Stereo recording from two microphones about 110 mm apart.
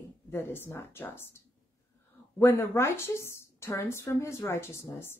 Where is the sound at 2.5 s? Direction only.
25° left (ahead or behind).